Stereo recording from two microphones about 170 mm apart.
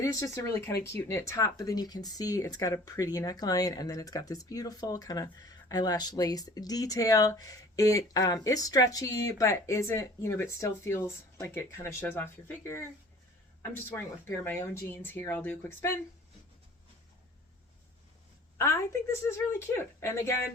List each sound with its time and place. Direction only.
0.0 s speech: 20° left (ahead or behind)
18.5 s speech: 15° left (ahead or behind)